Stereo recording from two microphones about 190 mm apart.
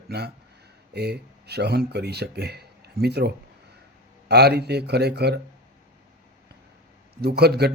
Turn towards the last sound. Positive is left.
turn(degrees=-60)  # may be behind; listen again after turning